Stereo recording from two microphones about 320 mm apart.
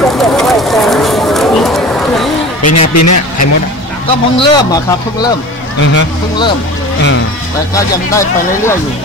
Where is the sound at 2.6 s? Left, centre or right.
Left.